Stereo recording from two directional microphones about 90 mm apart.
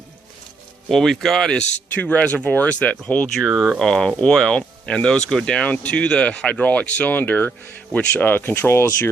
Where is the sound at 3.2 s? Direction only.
5° left (ahead or behind).